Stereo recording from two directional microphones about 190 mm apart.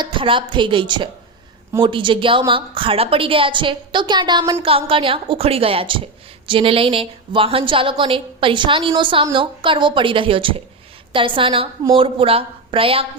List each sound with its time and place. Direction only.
0.0 s a woman's voice: 25° right (ahead or behind)